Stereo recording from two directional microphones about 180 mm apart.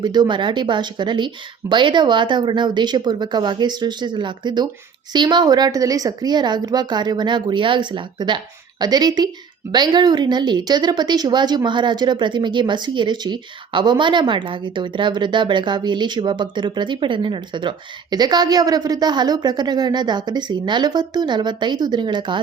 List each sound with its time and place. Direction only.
0.0 s a woman's voice: 25° right (ahead or behind)